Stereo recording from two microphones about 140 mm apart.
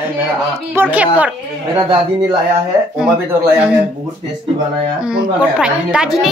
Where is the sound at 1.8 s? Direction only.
35° right (ahead or behind).